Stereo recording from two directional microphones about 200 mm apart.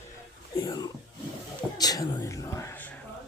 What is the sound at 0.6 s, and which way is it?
Speech, 25° left (ahead or behind).